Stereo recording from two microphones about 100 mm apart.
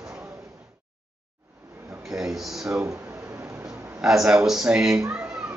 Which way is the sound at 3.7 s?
5° right (ahead or behind).